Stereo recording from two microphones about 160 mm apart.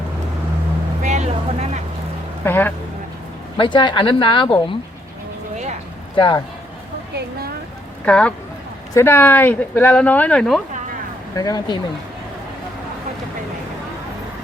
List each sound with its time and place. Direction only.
1.0 s vehicle: 45° right (ahead or behind)
2.4 s speech: 10° left (ahead or behind)
3.6 s a woman's voice: 30° left (ahead or behind)
6.1 s speech: 30° left (ahead or behind)
8.0 s speech: 10° left (ahead or behind)
11.3 s speech: 25° left (ahead or behind)